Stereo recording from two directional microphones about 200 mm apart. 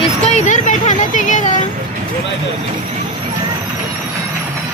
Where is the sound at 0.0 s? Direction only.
35° left (ahead or behind).